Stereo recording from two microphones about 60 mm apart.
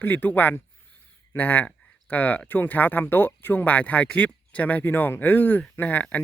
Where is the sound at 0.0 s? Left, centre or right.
Left.